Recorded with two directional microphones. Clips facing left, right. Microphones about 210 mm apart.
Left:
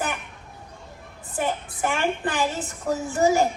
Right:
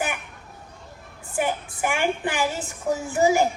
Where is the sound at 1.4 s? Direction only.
15° right (ahead or behind).